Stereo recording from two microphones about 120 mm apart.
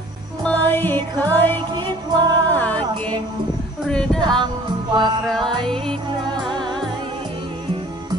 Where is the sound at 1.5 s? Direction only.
40° right (ahead or behind).